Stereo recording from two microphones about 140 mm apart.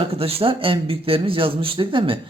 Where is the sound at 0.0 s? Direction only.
45° right (ahead or behind).